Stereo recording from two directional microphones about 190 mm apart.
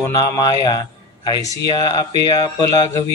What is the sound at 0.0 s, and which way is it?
A man's voice, 20° left (ahead or behind).